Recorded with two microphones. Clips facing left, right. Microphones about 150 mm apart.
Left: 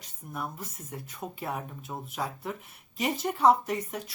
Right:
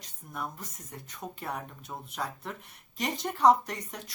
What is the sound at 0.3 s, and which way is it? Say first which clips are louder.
A woman's voice: left 1 dB; 5° left (ahead or behind).